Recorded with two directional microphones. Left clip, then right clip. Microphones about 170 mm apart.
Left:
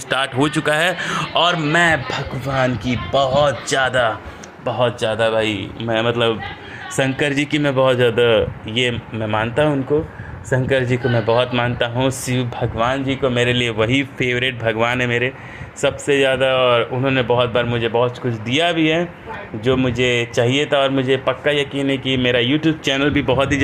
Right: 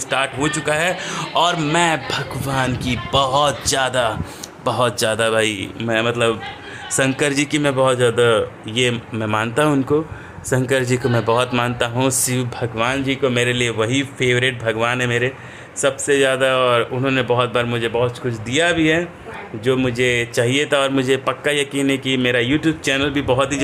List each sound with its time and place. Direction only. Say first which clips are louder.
0.1 s a man's voice: left 1 dB; 25° left (ahead or behind)
1.3 s a man's voice: even; 5° left (ahead or behind)
1.6 s speech: left 2 dB; 5° right (ahead or behind)
4.6 s a man's voice: even; 25° right (ahead or behind)
5.9 s a man's voice: even; 10° right (ahead or behind)
8.8 s speech: right 1 dB; 15° right (ahead or behind)
13.6 s a man's voice: left 1 dB; 5° left (ahead or behind)